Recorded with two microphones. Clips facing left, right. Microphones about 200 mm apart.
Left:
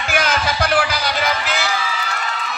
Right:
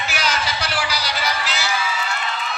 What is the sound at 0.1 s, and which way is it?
Music, 50° left (ahead or behind).